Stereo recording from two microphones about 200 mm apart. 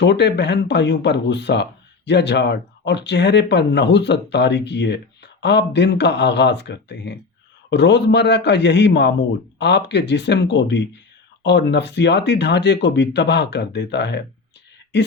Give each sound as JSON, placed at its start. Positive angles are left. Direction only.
{"t": 0.0, "sound": "speech", "side_deg": 60}